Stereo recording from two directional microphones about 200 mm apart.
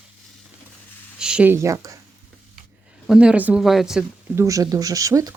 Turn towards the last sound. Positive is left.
turn(degrees=-15)  # may be behind; listen again after turning